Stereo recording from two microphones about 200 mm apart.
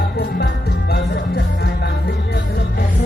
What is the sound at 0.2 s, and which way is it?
Music, 55° left (ahead or behind).